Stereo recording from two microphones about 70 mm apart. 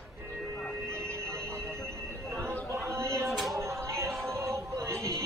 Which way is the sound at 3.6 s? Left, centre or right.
Right.